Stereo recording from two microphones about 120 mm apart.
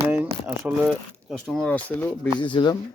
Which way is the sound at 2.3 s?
40° left (ahead or behind).